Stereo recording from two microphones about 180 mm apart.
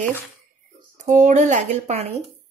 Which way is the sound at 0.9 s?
40° right (ahead or behind).